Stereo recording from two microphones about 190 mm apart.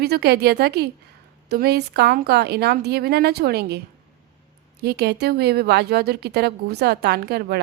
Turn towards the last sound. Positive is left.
turn(degrees=-60)  # may be behind; listen again after turning